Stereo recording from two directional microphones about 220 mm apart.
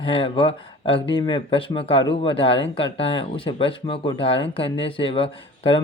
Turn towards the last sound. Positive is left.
turn(degrees=25)  # may be behind; listen again after turning